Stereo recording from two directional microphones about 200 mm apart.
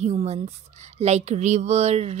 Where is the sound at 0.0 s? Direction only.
35° right (ahead or behind).